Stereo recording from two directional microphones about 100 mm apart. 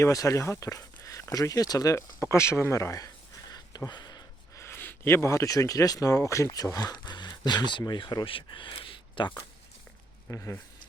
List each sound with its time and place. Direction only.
0.0 s speech: 30° left (ahead or behind)
3.5 s a sound: 40° left (ahead or behind)
4.5 s speech: 25° left (ahead or behind); by 9.3 s 55° left (ahead or behind)
10.3 s speech: 30° left (ahead or behind)